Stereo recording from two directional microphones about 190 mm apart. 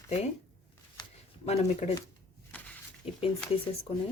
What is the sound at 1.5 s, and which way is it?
Speech, 35° left (ahead or behind).